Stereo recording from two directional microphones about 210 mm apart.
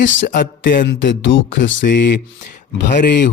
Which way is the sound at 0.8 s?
60° left (ahead or behind).